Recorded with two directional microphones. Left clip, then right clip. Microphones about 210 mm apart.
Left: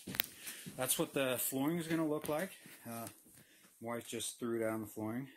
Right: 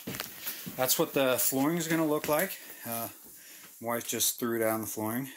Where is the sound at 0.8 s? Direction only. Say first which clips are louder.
Right 9 dB; centre (ahead or behind).